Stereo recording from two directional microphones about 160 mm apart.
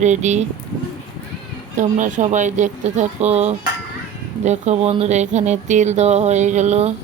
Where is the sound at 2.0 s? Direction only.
50° right (ahead or behind).